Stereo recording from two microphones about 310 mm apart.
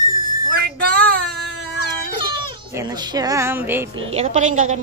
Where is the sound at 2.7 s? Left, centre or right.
Centre.